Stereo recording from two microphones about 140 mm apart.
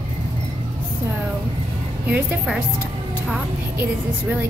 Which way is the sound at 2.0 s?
5° right (ahead or behind).